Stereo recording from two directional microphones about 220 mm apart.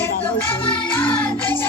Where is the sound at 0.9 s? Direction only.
10° left (ahead or behind).